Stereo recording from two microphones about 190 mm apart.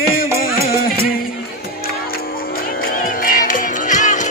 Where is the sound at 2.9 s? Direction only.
50° left (ahead or behind).